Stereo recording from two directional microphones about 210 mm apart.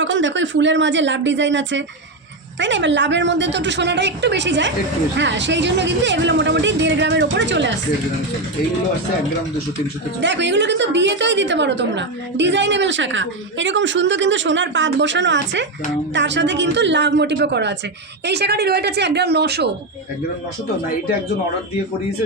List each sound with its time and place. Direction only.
0.0 s a woman's voice: 60° right (ahead or behind)
10.2 s a woman's voice: 55° right (ahead or behind)